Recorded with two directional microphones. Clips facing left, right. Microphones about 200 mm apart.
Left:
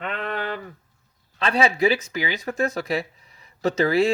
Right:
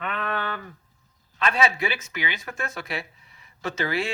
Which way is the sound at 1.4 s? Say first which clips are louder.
Left 4 dB; 30° left (ahead or behind).